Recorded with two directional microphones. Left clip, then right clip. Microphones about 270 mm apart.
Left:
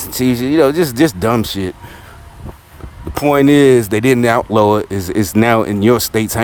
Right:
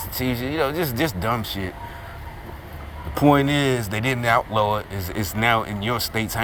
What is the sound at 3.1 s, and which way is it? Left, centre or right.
Speech, left.